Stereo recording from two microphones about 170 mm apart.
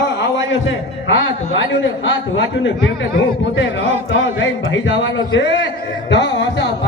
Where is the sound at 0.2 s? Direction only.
90° left.